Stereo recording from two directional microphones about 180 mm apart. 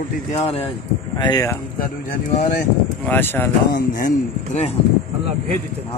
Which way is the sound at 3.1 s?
10° left (ahead or behind).